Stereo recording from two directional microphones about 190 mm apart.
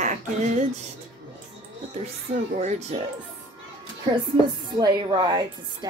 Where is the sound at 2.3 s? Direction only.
35° right (ahead or behind).